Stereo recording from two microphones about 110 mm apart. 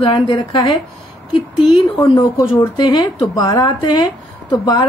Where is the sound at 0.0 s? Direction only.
40° left (ahead or behind).